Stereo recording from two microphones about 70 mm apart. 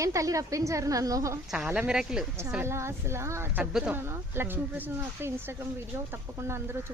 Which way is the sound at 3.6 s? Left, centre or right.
Centre.